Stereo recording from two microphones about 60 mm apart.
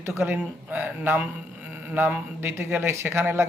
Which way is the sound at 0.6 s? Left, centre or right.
Right.